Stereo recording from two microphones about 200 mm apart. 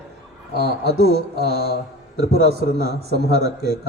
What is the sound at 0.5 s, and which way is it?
A man's voice, 55° right (ahead or behind).